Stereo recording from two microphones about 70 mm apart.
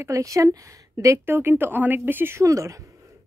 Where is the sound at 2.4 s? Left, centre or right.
Right.